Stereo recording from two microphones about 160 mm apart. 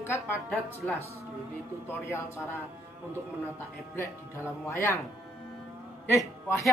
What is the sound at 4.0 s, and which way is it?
Speech, 15° left (ahead or behind).